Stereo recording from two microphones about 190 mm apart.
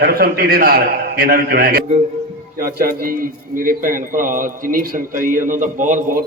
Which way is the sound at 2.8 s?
50° right (ahead or behind).